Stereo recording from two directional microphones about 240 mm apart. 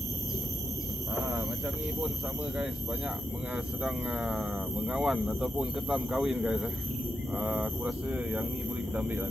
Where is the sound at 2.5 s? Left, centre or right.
Centre.